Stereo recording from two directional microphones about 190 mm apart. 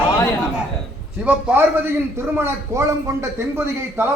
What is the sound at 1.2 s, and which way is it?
A man's voice, 5° right (ahead or behind).